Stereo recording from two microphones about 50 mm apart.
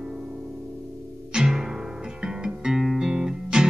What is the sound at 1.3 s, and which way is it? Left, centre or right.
Music, centre.